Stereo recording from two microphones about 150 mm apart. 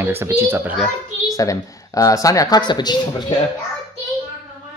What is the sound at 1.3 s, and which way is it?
Speech, 20° left (ahead or behind).